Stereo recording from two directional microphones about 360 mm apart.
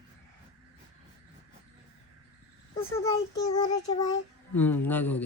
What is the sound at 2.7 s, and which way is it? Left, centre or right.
A child's voice, centre.